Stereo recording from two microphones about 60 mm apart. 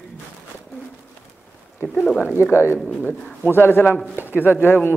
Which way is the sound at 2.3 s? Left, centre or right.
Left.